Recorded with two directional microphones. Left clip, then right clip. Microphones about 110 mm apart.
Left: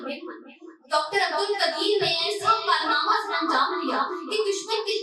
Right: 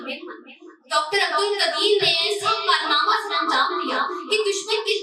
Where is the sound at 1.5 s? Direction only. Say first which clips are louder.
Right 4 dB; 30° right (ahead or behind).